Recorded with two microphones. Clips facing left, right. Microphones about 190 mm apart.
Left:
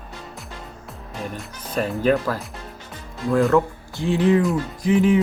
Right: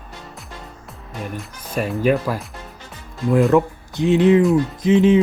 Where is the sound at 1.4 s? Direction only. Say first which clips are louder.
Even; 10° right (ahead or behind).